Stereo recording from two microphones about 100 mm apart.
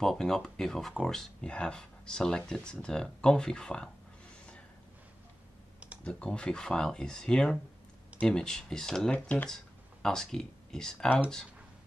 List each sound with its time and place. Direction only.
0.0 s speech: 5° left (ahead or behind)
6.0 s speech: 10° left (ahead or behind)
9.1 s speech: 15° left (ahead or behind)